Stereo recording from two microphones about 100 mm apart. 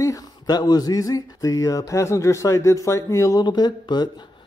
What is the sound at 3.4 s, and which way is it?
Speech, 45° left (ahead or behind).